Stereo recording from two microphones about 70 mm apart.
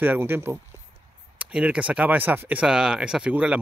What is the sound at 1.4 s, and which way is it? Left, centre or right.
Speech, centre.